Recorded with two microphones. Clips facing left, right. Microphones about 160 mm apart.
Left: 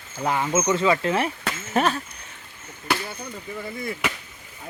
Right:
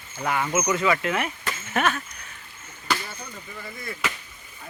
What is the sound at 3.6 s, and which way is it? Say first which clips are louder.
Speech: left 3 dB; 20° left (ahead or behind).